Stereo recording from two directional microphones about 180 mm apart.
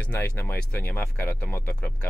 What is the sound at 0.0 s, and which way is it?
Speech, 10° left (ahead or behind).